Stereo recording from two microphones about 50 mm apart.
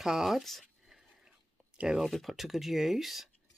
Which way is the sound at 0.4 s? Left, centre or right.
Centre.